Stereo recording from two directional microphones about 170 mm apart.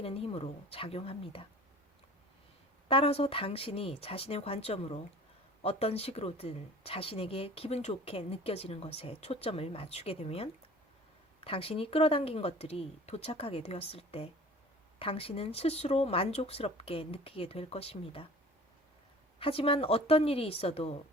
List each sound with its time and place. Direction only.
0.0 s a woman's voice: 35° left (ahead or behind)
2.9 s a woman's voice: 35° left (ahead or behind)
19.4 s a woman's voice: 35° left (ahead or behind)